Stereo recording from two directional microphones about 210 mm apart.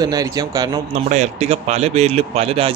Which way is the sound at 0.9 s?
30° right (ahead or behind).